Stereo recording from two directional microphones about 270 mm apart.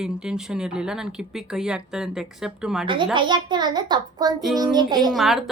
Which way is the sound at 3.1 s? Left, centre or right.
Centre.